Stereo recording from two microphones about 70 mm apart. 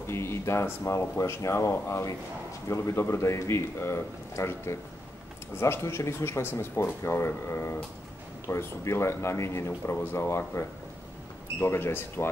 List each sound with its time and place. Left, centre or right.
0.0 s speech: left
11.6 s speech: left